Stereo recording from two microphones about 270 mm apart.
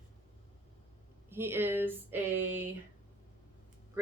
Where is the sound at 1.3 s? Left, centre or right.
Centre.